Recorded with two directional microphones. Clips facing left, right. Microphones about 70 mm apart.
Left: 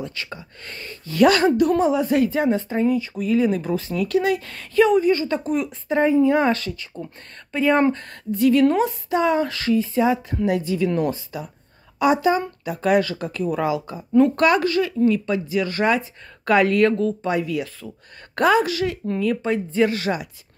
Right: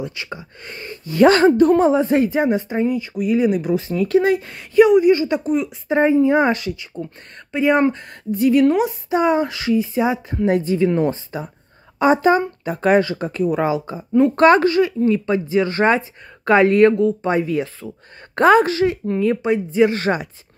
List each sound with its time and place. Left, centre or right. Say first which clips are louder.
0.0 s speech: right 3 dB; centre
5.9 s speech: right 2 dB; right
10.4 s speech: right 6 dB; right
13.0 s speech: right 4 dB; right
14.4 s speech: right 5 dB; right
18.5 s speech: right 6 dB; right
19.1 s speech: right 4 dB; centre
19.9 s speech: right 4 dB; right